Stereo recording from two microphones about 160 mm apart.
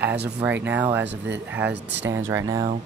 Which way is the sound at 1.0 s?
90° right.